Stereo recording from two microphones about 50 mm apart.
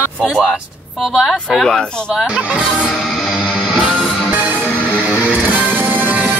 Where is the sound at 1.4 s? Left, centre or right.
Centre.